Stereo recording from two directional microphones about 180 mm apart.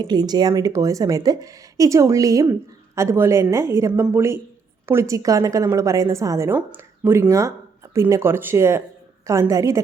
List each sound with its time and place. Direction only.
0.0 s a woman's voice: 25° right (ahead or behind)